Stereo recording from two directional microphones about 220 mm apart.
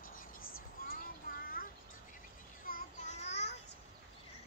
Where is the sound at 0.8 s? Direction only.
40° left (ahead or behind).